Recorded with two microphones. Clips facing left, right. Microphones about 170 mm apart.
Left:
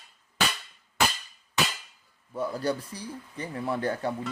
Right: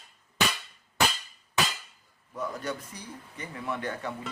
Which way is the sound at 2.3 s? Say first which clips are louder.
Left 5 dB; 30° left (ahead or behind).